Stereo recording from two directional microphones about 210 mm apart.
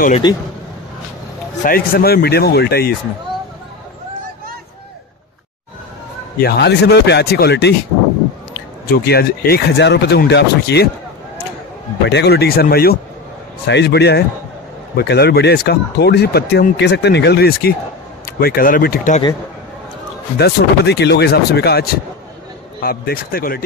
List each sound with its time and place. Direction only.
0.2 s a man's voice: 20° left (ahead or behind)
1.6 s speech: 45° left (ahead or behind)
6.4 s speech: 50° left (ahead or behind)
8.8 s speech: 45° left (ahead or behind)
12.1 s speech: 50° left (ahead or behind)
20.3 s speech: 50° left (ahead or behind)